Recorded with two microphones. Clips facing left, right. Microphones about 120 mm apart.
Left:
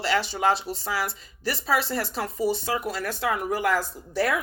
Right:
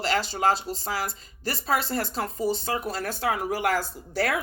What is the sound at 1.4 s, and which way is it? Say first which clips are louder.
Speech: left 1 dB; 45° right (ahead or behind).